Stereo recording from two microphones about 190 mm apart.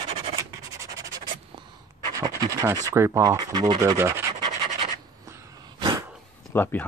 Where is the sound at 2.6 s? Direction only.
15° right (ahead or behind).